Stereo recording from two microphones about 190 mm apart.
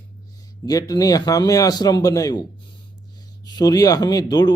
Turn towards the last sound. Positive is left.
turn(degrees=20)  # may be behind; listen again after turning